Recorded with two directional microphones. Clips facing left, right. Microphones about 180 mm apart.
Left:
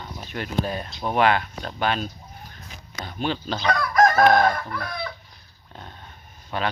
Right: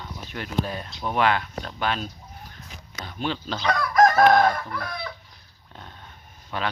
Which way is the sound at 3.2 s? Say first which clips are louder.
Left 2 dB; 50° left (ahead or behind).